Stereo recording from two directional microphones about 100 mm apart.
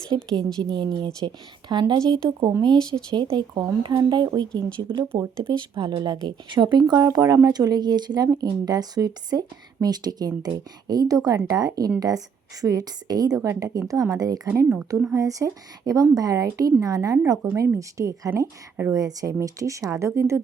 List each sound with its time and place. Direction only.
0.3 s speech: 45° right (ahead or behind)